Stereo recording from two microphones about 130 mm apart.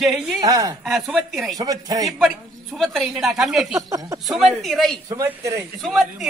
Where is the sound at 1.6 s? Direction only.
30° right (ahead or behind).